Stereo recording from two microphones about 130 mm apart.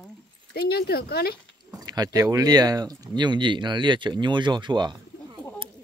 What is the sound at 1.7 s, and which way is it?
Speech, 30° right (ahead or behind).